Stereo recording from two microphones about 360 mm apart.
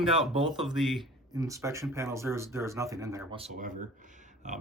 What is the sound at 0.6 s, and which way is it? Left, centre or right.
Speech, centre.